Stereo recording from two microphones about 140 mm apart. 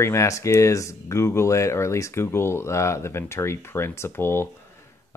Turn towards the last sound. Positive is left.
turn(degrees=15)  # may be behind; listen again after turning